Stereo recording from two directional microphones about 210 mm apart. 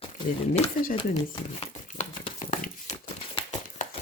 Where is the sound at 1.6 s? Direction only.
30° left (ahead or behind).